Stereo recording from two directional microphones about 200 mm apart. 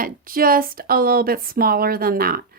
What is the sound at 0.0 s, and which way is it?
Speech, 45° right (ahead or behind).